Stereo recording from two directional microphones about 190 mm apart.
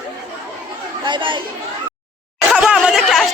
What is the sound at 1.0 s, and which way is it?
Speech, 25° right (ahead or behind).